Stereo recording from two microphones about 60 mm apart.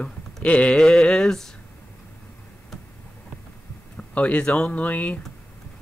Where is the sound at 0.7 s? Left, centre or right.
Centre.